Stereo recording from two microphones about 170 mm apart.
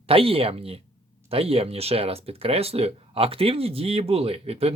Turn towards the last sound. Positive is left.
turn(degrees=-35)  # may be behind; listen again after turning